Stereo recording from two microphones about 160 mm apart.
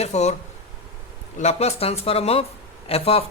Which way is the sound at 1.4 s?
45° left (ahead or behind).